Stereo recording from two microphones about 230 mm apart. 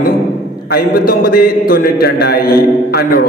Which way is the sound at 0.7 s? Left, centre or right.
Left.